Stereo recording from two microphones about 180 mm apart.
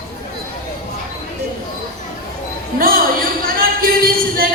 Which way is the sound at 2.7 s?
55° right (ahead or behind).